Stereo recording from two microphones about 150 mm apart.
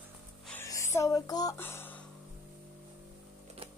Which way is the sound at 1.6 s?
15° left (ahead or behind).